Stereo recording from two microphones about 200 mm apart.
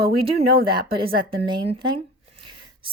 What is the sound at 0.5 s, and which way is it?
Speech, 50° right (ahead or behind).